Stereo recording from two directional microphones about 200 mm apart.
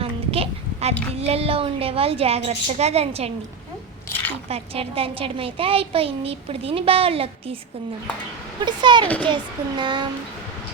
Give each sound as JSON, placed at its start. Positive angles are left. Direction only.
{"t": 0.0, "sound": "a sound", "side_deg": -30}
{"t": 1.3, "sound": "a woman's voice", "side_deg": -30}
{"t": 4.4, "sound": "a woman's voice", "side_deg": -30}
{"t": 8.6, "sound": "a woman's voice", "side_deg": -20}